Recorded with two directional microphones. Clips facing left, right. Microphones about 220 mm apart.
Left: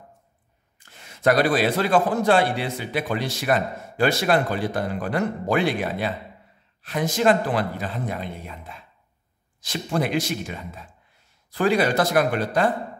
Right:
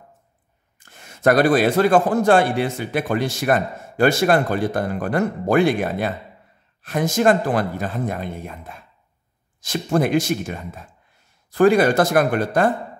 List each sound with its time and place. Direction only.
0.7 s a man's voice: 50° right (ahead or behind)